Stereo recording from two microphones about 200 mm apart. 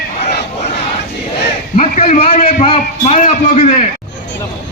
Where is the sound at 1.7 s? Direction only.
35° left (ahead or behind).